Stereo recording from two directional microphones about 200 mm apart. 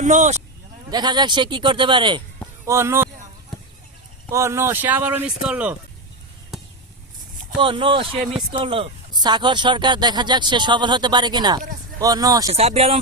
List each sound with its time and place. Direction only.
0.0 s speech: 35° right (ahead or behind)
0.9 s speech: 20° right (ahead or behind)
4.3 s speech: 15° right (ahead or behind)
7.6 s speech: 25° right (ahead or behind)
12.5 s speech: 30° right (ahead or behind)